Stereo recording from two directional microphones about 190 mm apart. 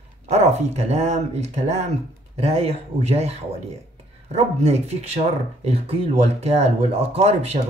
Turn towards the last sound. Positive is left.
turn(degrees=-30)  # may be behind; listen again after turning